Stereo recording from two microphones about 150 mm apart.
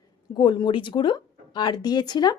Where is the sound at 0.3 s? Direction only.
30° left (ahead or behind).